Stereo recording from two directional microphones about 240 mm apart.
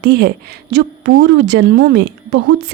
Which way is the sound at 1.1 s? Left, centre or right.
Right.